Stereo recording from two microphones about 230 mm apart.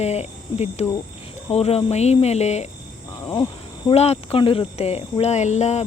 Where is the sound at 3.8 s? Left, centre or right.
Left.